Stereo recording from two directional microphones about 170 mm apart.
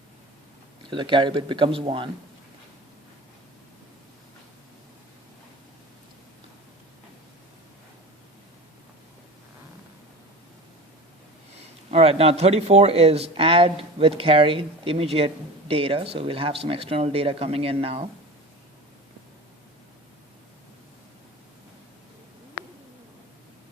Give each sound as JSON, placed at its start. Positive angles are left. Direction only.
{"t": 0.9, "sound": "speech", "side_deg": -30}
{"t": 11.9, "sound": "speech", "side_deg": -35}